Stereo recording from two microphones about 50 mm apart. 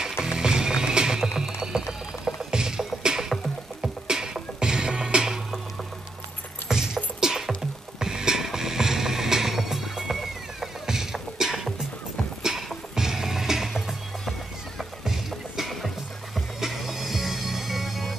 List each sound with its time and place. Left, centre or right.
0.2 s music: centre
6.7 s music: centre